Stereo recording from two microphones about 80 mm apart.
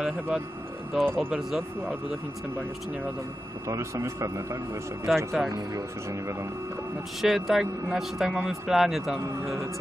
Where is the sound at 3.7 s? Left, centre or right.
Right.